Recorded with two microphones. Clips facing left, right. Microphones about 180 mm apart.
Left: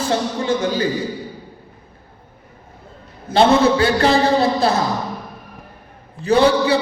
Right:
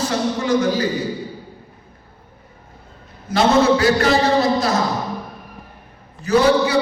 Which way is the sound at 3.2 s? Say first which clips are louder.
Left 1 dB; 30° left (ahead or behind).